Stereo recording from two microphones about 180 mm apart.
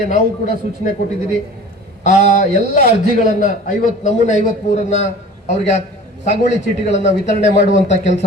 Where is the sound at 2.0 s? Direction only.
45° left (ahead or behind).